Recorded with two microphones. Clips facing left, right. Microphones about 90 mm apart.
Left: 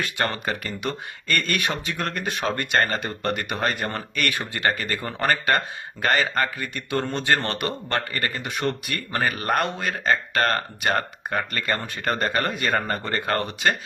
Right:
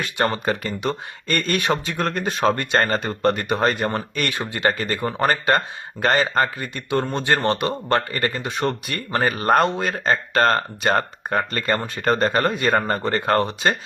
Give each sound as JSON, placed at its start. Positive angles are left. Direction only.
{"t": 0.0, "sound": "speech", "side_deg": -20}
{"t": 3.2, "sound": "speech", "side_deg": -25}